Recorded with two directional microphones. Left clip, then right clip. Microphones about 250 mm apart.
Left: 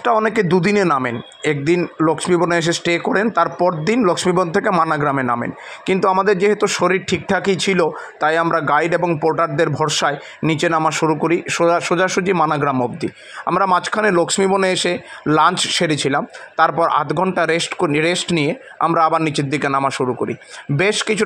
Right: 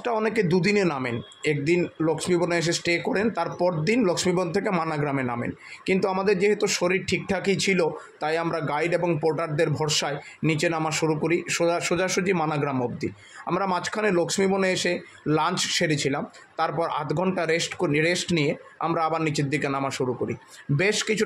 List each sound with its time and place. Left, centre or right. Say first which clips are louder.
0.0 s a man's voice: left 8 dB; centre